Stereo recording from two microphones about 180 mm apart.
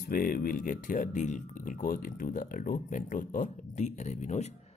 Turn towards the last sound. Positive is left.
turn(degrees=40)  # may be behind; listen again after turning